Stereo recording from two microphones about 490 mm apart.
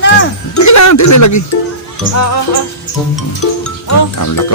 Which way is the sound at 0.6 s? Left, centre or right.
Left.